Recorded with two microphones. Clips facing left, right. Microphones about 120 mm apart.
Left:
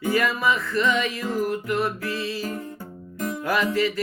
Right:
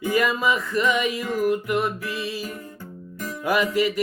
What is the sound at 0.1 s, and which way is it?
Speech, 15° right (ahead or behind).